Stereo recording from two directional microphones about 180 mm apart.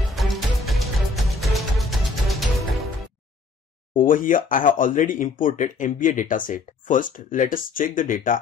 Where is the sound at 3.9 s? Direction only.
50° left (ahead or behind).